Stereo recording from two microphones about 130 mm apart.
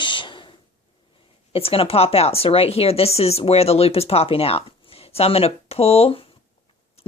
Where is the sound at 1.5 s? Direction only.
45° left (ahead or behind).